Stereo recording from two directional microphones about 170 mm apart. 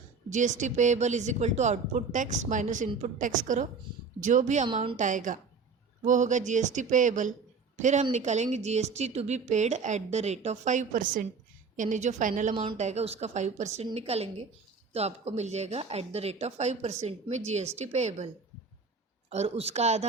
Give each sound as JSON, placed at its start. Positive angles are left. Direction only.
{"t": 0.3, "sound": "speech", "side_deg": -45}
{"t": 12.5, "sound": "speech", "side_deg": -35}
{"t": 19.3, "sound": "speech", "side_deg": -40}